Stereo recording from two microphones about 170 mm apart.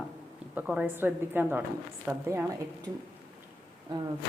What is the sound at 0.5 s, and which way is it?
A woman's voice, 10° right (ahead or behind).